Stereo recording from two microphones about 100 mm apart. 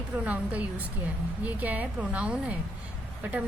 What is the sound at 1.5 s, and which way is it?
A woman's voice, 15° right (ahead or behind).